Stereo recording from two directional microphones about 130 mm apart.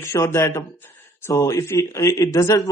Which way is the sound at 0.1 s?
20° left (ahead or behind).